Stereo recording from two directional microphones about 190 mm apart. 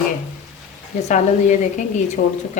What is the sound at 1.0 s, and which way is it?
A woman's voice, 40° left (ahead or behind).